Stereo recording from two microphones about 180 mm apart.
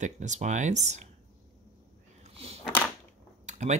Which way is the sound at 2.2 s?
35° right (ahead or behind).